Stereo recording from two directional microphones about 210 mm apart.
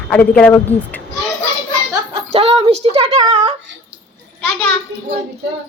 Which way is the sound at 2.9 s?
30° right (ahead or behind).